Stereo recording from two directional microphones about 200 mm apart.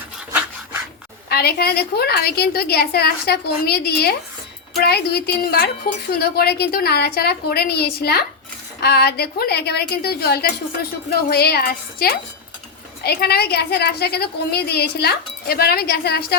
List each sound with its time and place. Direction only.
1.3 s a woman's voice: 50° left (ahead or behind)